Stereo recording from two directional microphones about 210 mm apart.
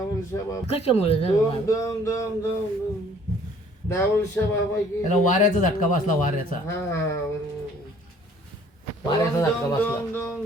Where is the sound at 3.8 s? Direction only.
15° left (ahead or behind).